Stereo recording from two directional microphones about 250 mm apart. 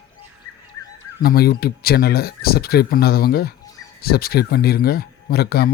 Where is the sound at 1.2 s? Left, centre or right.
Left.